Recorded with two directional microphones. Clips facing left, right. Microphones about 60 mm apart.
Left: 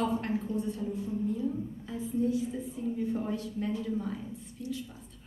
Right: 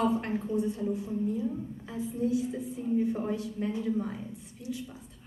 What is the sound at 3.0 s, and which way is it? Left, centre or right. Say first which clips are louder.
A woman's voice: right 4 dB; centre.